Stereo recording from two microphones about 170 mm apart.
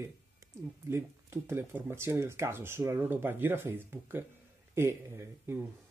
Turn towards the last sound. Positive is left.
turn(degrees=-15)  # may be behind; listen again after turning